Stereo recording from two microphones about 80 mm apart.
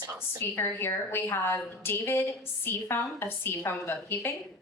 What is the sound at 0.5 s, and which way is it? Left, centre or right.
A woman's voice, left.